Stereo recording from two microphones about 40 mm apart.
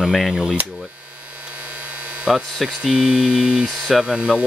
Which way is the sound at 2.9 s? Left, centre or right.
Right.